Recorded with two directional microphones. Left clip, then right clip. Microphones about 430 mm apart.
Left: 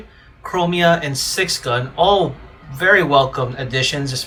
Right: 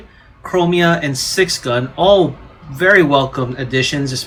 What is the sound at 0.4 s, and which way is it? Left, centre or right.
Speech, centre.